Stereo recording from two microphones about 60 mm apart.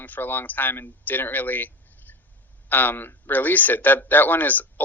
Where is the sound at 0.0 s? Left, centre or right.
Left.